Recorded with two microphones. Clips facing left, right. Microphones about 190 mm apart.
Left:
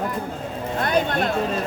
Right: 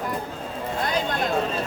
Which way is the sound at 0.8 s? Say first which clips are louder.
Left 5 dB; 60° left (ahead or behind).